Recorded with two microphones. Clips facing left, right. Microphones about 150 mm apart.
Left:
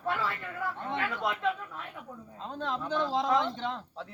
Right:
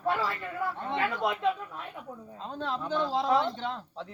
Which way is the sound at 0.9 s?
15° right (ahead or behind).